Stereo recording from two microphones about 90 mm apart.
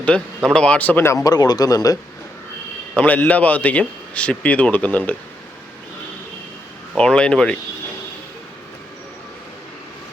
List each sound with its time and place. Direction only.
0.1 s a man's voice: 10° left (ahead or behind)
1.0 s speech: 35° left (ahead or behind)
1.3 s speech: 50° left (ahead or behind)
2.9 s a man's voice: 15° left (ahead or behind)
6.9 s a man's voice: 10° left (ahead or behind)